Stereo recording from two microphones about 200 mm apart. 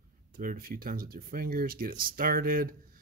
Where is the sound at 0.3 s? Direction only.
45° right (ahead or behind).